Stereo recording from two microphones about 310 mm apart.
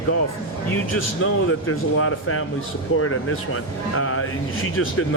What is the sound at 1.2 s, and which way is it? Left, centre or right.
Speech, left.